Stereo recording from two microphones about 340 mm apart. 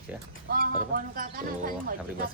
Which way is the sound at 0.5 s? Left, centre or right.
Right.